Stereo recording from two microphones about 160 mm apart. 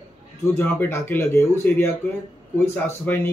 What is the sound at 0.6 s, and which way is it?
Speech, 15° left (ahead or behind).